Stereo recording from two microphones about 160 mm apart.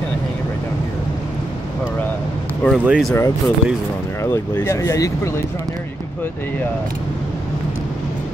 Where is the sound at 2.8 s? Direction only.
5° right (ahead or behind).